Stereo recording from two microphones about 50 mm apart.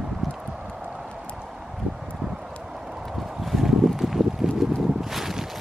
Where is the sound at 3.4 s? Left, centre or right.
Centre.